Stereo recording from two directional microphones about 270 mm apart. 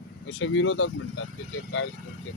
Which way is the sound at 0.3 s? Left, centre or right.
Left.